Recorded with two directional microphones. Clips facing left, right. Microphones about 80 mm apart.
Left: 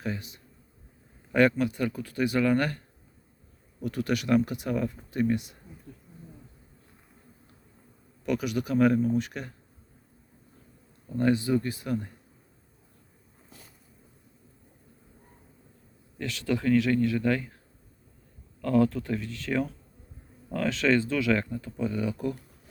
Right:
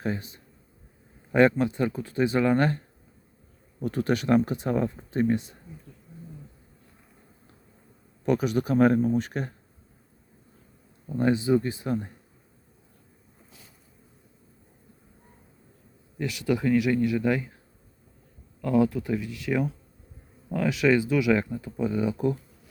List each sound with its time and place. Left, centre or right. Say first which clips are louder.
0.0 s speech: right 4 dB; right
8.2 s speech: right 4 dB; right
11.1 s speech: right 2 dB; right
16.1 s speech: right 3 dB; centre
18.6 s speech: right 1 dB; centre